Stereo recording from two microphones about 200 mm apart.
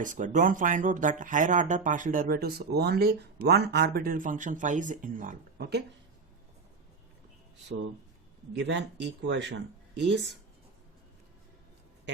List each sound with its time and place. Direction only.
0.0 s speech: 40° right (ahead or behind)
8.5 s speech: 65° right (ahead or behind)